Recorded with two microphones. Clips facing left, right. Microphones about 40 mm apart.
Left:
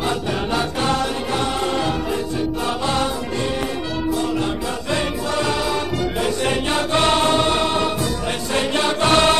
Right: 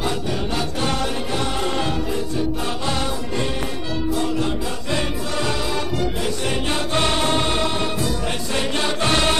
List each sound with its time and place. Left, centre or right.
0.6 s music: left
4.9 s music: left
6.4 s choir: left
8.5 s music: left